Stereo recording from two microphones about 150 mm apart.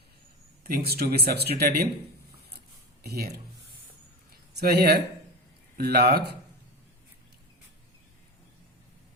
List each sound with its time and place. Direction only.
0.8 s speech: 90° right
3.0 s speech: 90° right
4.5 s speech: 90° right